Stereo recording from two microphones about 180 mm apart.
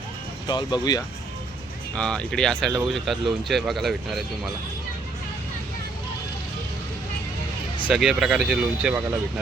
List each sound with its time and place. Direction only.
0.4 s speech: 25° left (ahead or behind)
2.0 s speech: 5° left (ahead or behind)
7.9 s speech: 5° right (ahead or behind)